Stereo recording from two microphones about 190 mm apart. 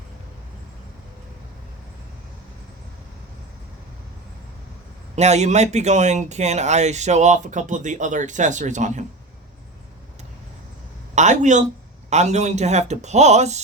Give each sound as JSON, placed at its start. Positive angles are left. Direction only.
{"t": 5.1, "sound": "speech", "side_deg": -35}
{"t": 11.1, "sound": "speech", "side_deg": -40}